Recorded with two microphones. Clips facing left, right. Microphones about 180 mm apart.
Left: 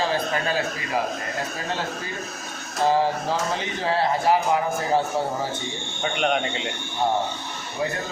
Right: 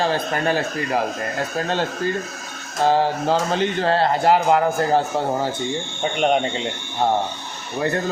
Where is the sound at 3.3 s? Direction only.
70° right (ahead or behind).